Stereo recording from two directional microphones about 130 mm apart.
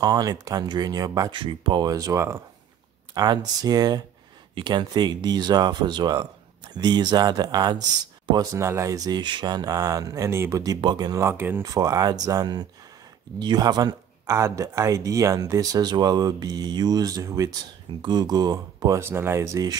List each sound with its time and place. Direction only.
0.0 s speech: 30° right (ahead or behind)
1.4 s speech: 40° right (ahead or behind)
8.5 s speech: 20° right (ahead or behind)